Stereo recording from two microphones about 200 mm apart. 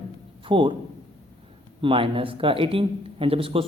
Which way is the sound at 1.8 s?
25° right (ahead or behind).